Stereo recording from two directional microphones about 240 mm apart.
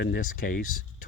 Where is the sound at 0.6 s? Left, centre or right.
Left.